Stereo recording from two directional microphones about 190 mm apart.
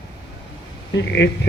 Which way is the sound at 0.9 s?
65° left (ahead or behind).